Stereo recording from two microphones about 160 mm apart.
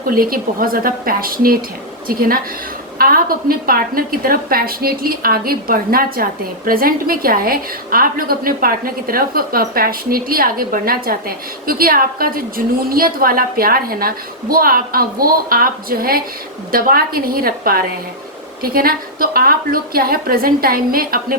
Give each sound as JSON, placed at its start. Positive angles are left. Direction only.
{"t": 0.0, "sound": "a woman's voice", "side_deg": -65}